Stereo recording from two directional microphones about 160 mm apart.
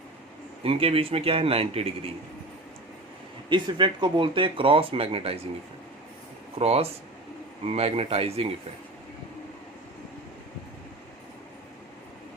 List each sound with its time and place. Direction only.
0.6 s speech: 35° right (ahead or behind)
3.5 s speech: 30° right (ahead or behind)
6.6 s speech: 40° right (ahead or behind)